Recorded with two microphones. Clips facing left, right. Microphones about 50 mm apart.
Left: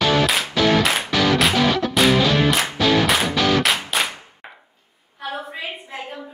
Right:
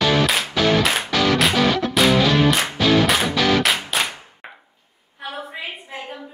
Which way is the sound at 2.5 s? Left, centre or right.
Centre.